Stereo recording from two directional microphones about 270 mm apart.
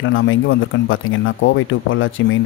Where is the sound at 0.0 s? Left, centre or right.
Left.